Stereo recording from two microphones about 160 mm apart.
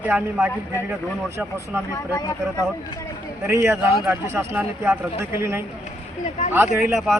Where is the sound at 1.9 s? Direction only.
20° left (ahead or behind).